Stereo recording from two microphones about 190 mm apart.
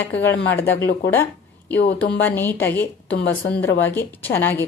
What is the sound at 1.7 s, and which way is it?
Speech, 60° left (ahead or behind).